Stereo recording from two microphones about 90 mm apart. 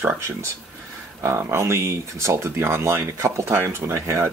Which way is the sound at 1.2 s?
30° right (ahead or behind).